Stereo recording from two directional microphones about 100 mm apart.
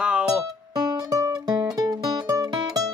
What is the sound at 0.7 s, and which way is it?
Music, 40° right (ahead or behind).